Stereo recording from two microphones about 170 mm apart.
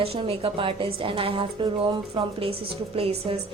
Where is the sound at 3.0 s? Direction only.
35° right (ahead or behind).